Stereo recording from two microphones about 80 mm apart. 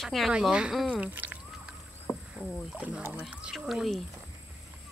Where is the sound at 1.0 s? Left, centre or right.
Right.